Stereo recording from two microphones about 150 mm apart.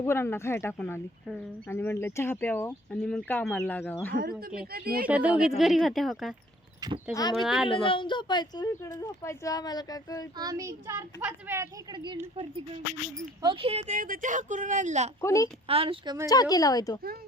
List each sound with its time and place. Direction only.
0.0 s speech: 15° left (ahead or behind)
4.1 s speech: 85° right
5.0 s speech: 10° right (ahead or behind)
7.1 s speech: 25° left (ahead or behind)
7.3 s speech: centre (ahead or behind)
7.7 s speech: 35° left (ahead or behind)
10.3 s a child's voice: 25° right (ahead or behind)
13.4 s speech: 35° right (ahead or behind); by 15.1 s 50° right (ahead or behind)
15.2 s speech: 20° left (ahead or behind)
15.6 s speech: 40° right (ahead or behind)
16.3 s speech: 25° left (ahead or behind)